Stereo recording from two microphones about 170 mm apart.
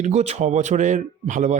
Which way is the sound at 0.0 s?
40° right (ahead or behind).